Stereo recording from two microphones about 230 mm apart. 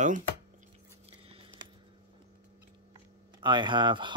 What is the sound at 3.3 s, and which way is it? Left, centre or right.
Speech, centre.